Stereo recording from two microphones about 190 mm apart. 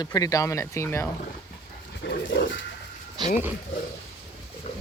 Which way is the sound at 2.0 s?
65° left (ahead or behind).